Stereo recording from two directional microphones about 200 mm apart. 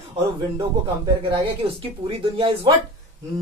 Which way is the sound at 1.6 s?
30° right (ahead or behind).